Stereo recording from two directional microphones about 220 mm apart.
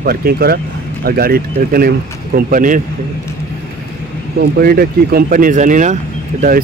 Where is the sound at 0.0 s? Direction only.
45° right (ahead or behind).